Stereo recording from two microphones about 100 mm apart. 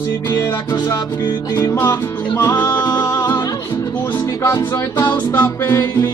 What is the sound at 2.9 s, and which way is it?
Music, 45° left (ahead or behind).